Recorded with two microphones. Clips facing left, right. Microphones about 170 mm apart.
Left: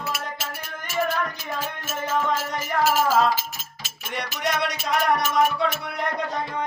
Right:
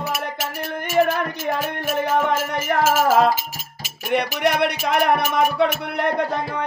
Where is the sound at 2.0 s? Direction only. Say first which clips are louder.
Right 3 dB; 65° right (ahead or behind).